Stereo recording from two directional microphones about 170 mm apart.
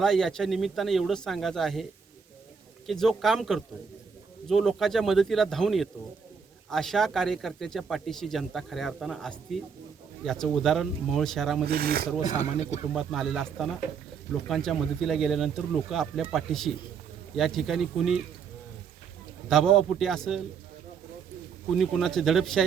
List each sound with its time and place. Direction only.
0.0 s speech: centre (ahead or behind)
11.6 s speech: 65° right (ahead or behind)
12.2 s speech: 45° left (ahead or behind)
12.9 s speech: centre (ahead or behind)
19.5 s speech: centre (ahead or behind)
21.8 s speech: centre (ahead or behind)